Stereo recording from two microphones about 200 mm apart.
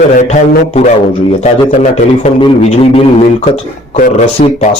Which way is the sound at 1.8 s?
35° left (ahead or behind).